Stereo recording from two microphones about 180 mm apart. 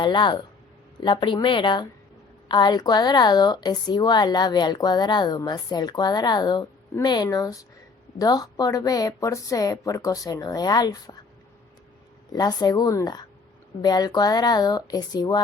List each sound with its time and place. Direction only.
0.0 s speech: 25° left (ahead or behind)
12.3 s speech: 20° left (ahead or behind)